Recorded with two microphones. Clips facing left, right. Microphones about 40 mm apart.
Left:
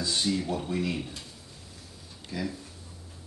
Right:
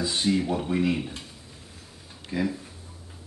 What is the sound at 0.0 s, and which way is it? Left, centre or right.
Speech, right.